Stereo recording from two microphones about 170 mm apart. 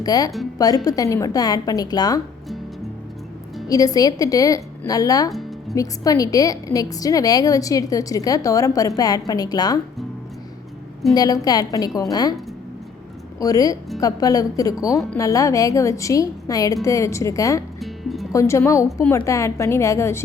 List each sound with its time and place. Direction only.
0.0 s a woman's voice: 20° left (ahead or behind)
3.7 s a woman's voice: 20° left (ahead or behind)
11.1 s a woman's voice: 20° left (ahead or behind)
13.4 s a woman's voice: 20° left (ahead or behind)
17.7 s music: centre (ahead or behind)
18.3 s a woman's voice: 15° left (ahead or behind)